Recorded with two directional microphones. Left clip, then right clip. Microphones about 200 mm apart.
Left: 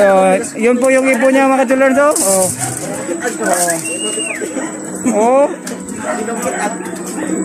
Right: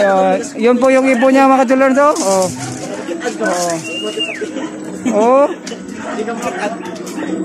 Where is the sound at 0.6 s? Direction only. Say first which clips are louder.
Right 3 dB; 10° right (ahead or behind).